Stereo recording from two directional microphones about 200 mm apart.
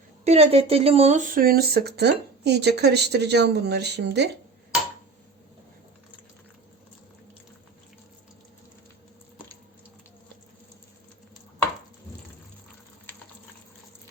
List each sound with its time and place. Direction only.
0.3 s speech: 30° right (ahead or behind); by 4.3 s 55° right (ahead or behind)